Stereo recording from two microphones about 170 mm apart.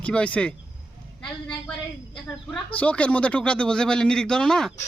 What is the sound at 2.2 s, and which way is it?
Speech, 5° left (ahead or behind).